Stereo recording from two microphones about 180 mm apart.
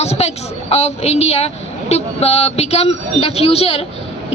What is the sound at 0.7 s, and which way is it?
A woman's voice, 35° left (ahead or behind).